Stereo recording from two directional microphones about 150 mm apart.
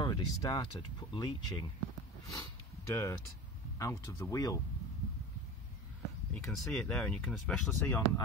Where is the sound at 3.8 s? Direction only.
20° left (ahead or behind).